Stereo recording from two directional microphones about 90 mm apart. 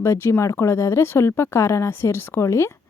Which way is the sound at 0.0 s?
30° left (ahead or behind).